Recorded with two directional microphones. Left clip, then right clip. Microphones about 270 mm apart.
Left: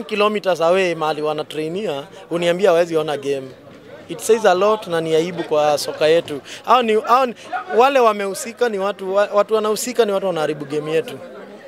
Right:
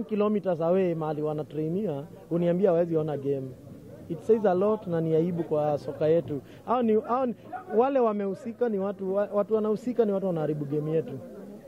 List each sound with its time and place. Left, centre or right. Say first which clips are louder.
0.0 s speech: left 9 dB; centre